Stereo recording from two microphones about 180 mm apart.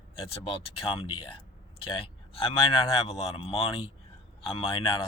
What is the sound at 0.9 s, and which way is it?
Speech, 30° left (ahead or behind).